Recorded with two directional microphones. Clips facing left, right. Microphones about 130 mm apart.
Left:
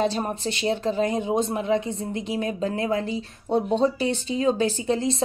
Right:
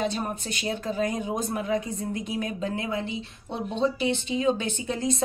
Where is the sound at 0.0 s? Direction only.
30° left (ahead or behind).